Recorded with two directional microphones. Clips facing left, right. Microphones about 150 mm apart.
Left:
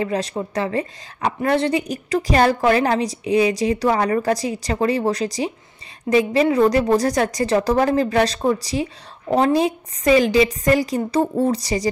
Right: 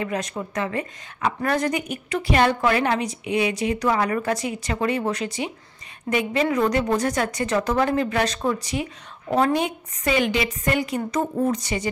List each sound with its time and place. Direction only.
0.0 s a woman's voice: 30° left (ahead or behind)